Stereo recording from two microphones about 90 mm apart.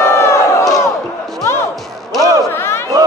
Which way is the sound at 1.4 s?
30° left (ahead or behind).